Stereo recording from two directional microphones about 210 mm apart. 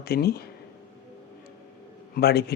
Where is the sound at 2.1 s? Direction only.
50° left (ahead or behind).